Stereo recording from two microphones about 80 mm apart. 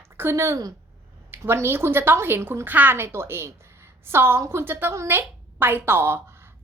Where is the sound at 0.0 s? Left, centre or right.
Right.